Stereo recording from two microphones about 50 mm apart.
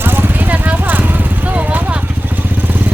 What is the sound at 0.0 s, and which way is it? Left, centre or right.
Vehicle, right.